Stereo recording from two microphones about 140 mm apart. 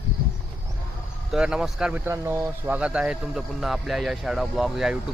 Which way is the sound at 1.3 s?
5° right (ahead or behind).